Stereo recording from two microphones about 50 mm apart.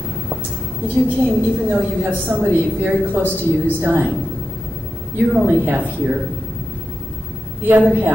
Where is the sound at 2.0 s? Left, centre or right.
Right.